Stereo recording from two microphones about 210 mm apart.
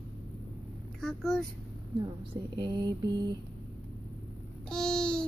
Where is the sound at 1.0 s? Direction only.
Centre (ahead or behind).